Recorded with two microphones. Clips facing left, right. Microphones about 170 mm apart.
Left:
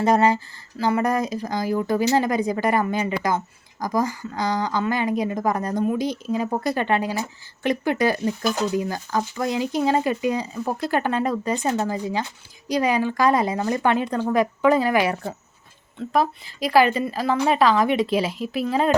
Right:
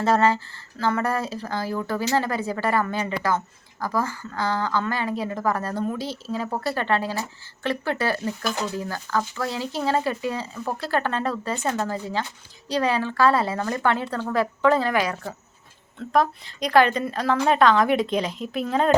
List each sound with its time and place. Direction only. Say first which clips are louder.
0.0 s speech: left 2 dB; 15° left (ahead or behind)
15.0 s speech: left 4 dB; 30° left (ahead or behind)
16.0 s a woman's voice: even; 5° left (ahead or behind)